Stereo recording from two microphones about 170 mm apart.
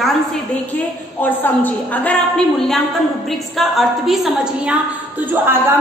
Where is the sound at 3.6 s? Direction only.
Centre (ahead or behind).